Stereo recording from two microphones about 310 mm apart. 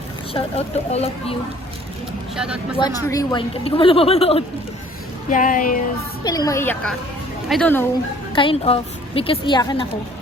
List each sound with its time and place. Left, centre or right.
0.3 s speech: centre
2.3 s speech: centre
2.7 s a woman's voice: centre
6.2 s a woman's voice: centre
8.4 s a woman's voice: centre